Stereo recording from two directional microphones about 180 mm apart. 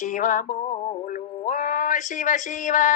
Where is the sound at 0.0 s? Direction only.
45° left (ahead or behind).